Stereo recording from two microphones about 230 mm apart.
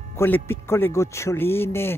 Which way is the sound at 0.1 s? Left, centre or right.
Centre.